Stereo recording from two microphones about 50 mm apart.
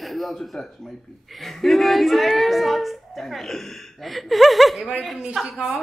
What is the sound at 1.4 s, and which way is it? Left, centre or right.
Speech, centre.